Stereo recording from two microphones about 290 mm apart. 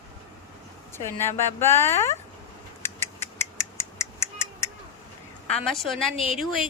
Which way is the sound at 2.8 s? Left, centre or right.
Centre.